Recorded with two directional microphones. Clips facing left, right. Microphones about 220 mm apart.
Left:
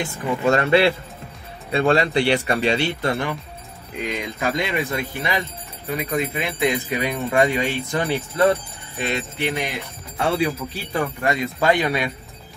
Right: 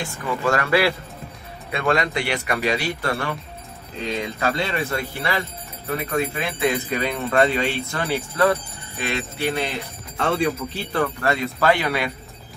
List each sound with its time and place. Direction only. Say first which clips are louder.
0.0 s speech: left 3 dB; 20° left (ahead or behind)